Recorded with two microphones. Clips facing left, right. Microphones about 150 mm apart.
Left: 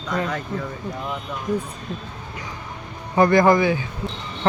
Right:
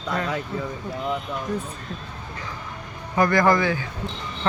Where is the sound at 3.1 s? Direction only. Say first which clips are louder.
Left 4 dB; 25° left (ahead or behind).